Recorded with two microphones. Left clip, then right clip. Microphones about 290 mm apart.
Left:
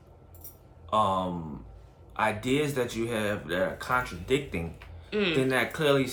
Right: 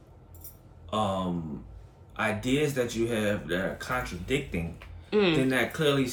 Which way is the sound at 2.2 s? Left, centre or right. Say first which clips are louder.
Left 1 dB; centre.